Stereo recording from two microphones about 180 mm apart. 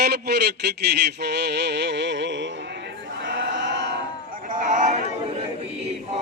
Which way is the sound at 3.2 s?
90° right.